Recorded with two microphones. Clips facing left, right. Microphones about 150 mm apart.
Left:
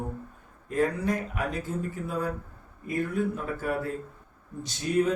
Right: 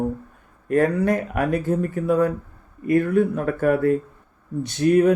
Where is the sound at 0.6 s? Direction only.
65° right (ahead or behind).